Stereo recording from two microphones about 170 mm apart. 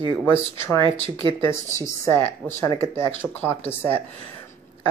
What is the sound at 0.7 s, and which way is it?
Speech, 30° right (ahead or behind).